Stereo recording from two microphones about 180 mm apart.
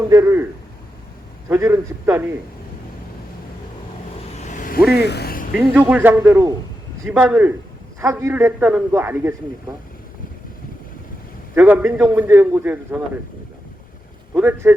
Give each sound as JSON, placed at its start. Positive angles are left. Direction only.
{"t": 0.1, "sound": "a man's voice", "side_deg": -15}
{"t": 1.5, "sound": "a man's voice", "side_deg": -15}
{"t": 4.4, "sound": "vehicle", "side_deg": 45}
{"t": 4.9, "sound": "a sound", "side_deg": 65}
{"t": 5.9, "sound": "a man's voice", "side_deg": -10}
{"t": 11.5, "sound": "a man's voice", "side_deg": -10}
{"t": 14.3, "sound": "a man's voice", "side_deg": -10}